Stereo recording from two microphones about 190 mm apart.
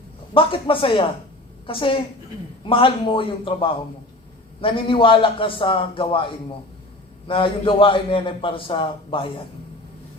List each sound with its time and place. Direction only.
0.3 s a man's voice: 30° left (ahead or behind)